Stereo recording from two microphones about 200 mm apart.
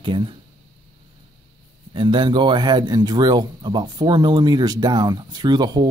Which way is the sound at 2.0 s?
25° right (ahead or behind).